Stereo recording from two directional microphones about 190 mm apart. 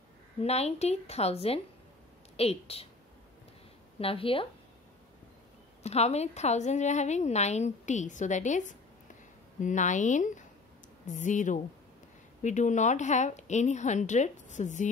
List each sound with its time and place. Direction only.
0.4 s a woman's voice: 35° left (ahead or behind)
4.0 s speech: 30° left (ahead or behind)
5.8 s a woman's voice: 35° left (ahead or behind)